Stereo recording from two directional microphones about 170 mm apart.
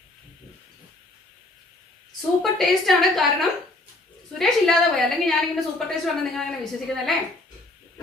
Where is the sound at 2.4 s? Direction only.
Centre (ahead or behind).